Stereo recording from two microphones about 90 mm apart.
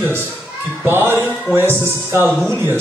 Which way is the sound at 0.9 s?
25° right (ahead or behind).